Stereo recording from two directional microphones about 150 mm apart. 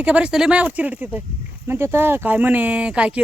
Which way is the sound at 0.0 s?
10° right (ahead or behind).